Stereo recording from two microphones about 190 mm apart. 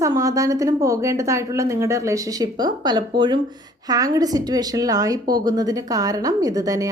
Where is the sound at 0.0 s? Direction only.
15° right (ahead or behind).